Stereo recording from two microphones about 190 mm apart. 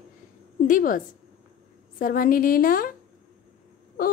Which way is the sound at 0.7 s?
45° left (ahead or behind).